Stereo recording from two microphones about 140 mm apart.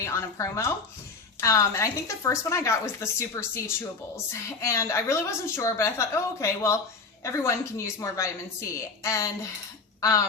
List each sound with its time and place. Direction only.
0.0 s a woman's voice: 20° left (ahead or behind)